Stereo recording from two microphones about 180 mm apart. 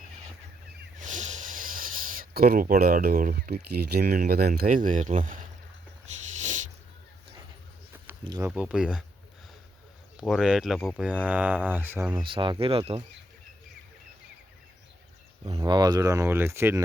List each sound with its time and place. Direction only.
0.9 s speech: 45° right (ahead or behind)
7.9 s a sound: 10° right (ahead or behind)
8.3 s speech: 10° right (ahead or behind)
10.2 s speech: 5° right (ahead or behind)
11.0 s speech: 10° right (ahead or behind)
12.2 s speech: 25° right (ahead or behind)
15.5 s speech: 25° right (ahead or behind)